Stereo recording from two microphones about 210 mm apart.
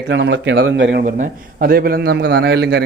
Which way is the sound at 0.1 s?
60° right (ahead or behind).